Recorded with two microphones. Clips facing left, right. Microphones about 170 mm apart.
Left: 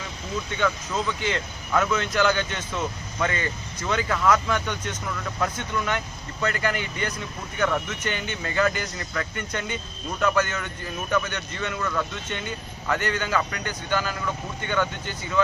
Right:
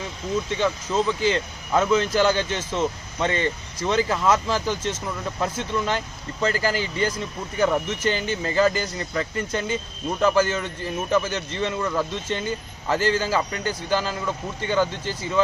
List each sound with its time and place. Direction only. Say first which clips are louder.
0.5 s speech: right 2 dB; 30° right (ahead or behind)